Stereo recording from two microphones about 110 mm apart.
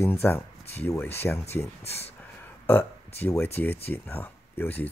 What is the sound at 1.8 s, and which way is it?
Speech, 70° left (ahead or behind).